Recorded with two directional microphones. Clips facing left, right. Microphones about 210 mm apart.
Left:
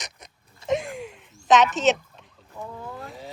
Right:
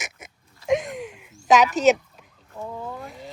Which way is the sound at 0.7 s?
Centre (ahead or behind).